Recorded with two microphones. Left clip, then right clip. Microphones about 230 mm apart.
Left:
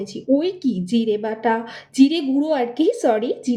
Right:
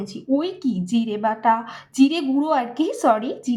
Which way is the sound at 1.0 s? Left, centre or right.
Centre.